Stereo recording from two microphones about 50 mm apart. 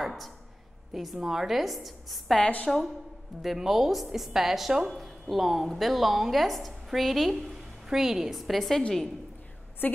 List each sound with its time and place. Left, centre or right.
0.0 s a sound: centre
0.9 s a woman's voice: centre
2.4 s a woman's voice: left
3.4 s a woman's voice: centre